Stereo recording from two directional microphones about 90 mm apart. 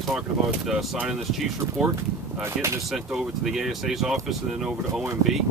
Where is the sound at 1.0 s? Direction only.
5° right (ahead or behind).